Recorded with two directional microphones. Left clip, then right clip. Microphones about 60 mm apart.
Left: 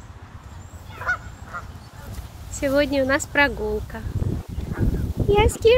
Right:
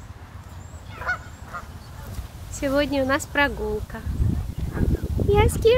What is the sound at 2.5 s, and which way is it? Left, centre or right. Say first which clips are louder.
Speech: left 2 dB; centre.